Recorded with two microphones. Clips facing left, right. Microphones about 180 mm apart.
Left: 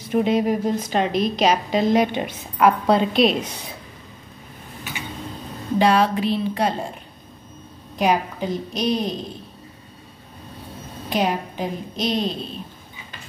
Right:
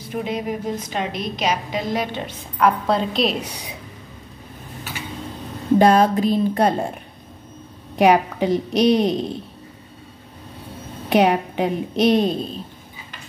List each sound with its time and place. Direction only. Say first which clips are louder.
0.1 s a woman's voice: left 6 dB; 25° left (ahead or behind)
2.6 s a woman's voice: left 2 dB; centre (ahead or behind)
5.8 s speech: right 3 dB; 45° right (ahead or behind)
8.0 s a woman's voice: right 5 dB; 65° right (ahead or behind)
11.1 s a woman's voice: right 6 dB; 65° right (ahead or behind)